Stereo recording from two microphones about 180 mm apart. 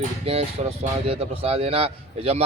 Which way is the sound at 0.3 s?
35° right (ahead or behind).